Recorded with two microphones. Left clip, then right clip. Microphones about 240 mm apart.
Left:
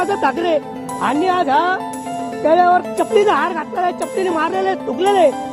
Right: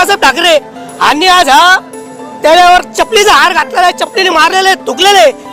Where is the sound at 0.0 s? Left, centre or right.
Centre.